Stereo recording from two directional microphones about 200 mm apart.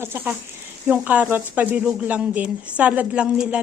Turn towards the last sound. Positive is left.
turn(degrees=-5)  # may be behind; listen again after turning